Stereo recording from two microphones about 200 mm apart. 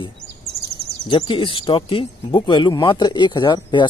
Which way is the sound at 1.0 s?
25° left (ahead or behind).